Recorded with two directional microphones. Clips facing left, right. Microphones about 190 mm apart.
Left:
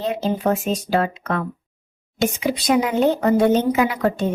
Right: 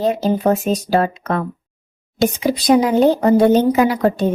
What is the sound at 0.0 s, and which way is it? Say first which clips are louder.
Speech: right 5 dB; 40° right (ahead or behind).